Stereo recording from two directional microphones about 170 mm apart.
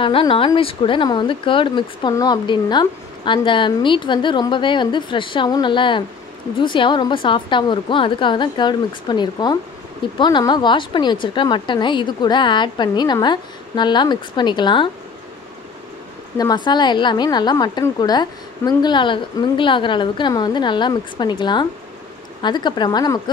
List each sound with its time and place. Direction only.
0.0 s speech: 30° left (ahead or behind)
16.3 s speech: 25° left (ahead or behind)